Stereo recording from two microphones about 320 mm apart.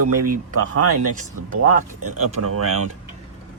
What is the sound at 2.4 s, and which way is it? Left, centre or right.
Speech, right.